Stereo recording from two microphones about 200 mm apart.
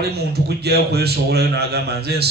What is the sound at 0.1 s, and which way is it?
A man's voice, 55° right (ahead or behind).